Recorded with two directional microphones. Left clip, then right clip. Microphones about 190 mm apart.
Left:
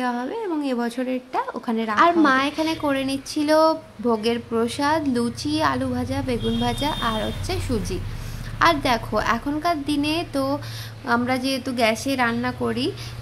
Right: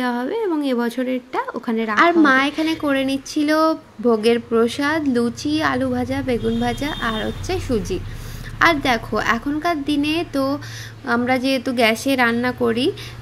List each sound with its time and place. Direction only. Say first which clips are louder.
0.0 s a woman's voice: right 4 dB; 15° right (ahead or behind)